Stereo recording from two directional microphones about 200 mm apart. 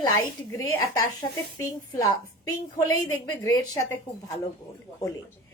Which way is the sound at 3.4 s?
20° left (ahead or behind).